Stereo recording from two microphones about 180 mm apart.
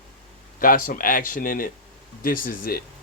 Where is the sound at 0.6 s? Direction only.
50° left (ahead or behind).